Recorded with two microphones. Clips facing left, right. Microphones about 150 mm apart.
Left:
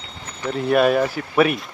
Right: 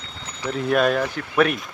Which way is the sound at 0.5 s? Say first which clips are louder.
Left 3 dB; 5° left (ahead or behind).